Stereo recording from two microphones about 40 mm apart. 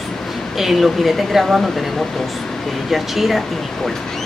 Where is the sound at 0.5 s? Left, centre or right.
Centre.